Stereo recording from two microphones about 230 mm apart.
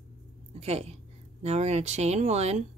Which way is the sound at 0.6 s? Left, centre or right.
Right.